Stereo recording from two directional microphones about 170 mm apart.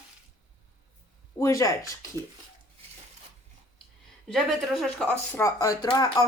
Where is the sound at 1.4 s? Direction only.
20° left (ahead or behind).